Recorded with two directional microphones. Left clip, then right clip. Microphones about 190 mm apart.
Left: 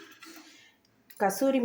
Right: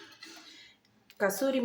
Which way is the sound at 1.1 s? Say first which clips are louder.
Left 3 dB; 20° left (ahead or behind).